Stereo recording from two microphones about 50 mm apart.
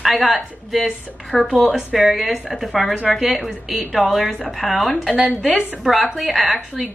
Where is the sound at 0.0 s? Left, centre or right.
Centre.